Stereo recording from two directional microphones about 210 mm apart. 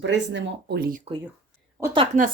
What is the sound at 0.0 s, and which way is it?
Speech, 55° right (ahead or behind).